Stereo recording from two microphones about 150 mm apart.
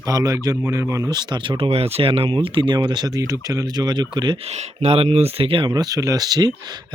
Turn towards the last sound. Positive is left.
turn(degrees=-25)  # may be behind; listen again after turning